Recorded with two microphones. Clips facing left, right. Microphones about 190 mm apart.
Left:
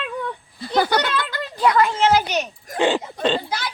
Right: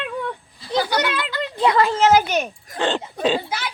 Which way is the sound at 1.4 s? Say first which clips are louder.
Even; 25° right (ahead or behind).